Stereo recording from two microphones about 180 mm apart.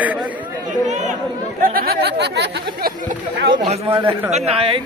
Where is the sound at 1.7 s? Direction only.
55° right (ahead or behind).